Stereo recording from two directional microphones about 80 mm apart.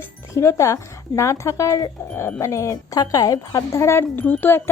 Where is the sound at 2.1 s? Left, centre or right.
Left.